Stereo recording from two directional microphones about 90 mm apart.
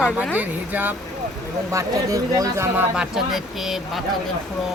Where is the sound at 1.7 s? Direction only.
35° right (ahead or behind).